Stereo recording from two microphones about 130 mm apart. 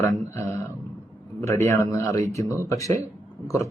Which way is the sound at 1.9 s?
25° left (ahead or behind).